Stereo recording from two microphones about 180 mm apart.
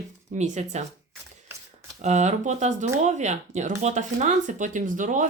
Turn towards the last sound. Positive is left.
turn(degrees=-45)  # may be behind; listen again after turning